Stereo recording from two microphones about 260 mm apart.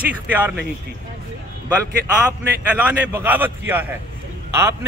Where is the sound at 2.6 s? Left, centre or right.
Centre.